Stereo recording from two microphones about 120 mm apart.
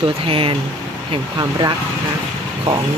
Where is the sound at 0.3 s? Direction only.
50° right (ahead or behind).